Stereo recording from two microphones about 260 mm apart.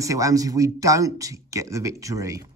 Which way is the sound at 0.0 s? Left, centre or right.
Centre.